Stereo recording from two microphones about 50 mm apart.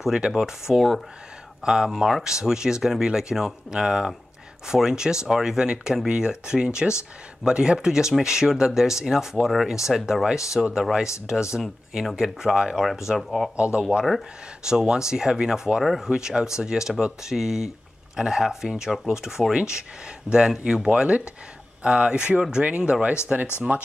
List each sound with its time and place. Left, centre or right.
0.0 s speech: centre
0.7 s speech: centre
1.6 s speech: centre
13.6 s speech: centre
15.8 s speech: centre
16.1 s speech: centre
19.4 s speech: centre
20.2 s speech: centre